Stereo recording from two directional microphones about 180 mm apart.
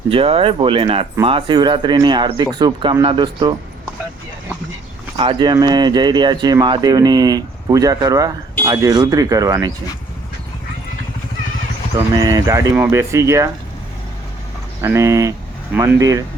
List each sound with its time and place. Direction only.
0.1 s speech: 30° right (ahead or behind)
5.1 s speech: 25° right (ahead or behind)
12.1 s speech: 20° right (ahead or behind)
14.8 s speech: 15° right (ahead or behind)